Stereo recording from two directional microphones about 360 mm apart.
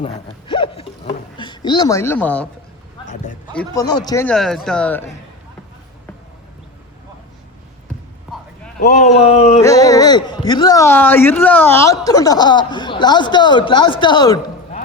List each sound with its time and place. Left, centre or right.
0.0 s a sound: centre
3.5 s speech: centre
8.8 s a man's voice: centre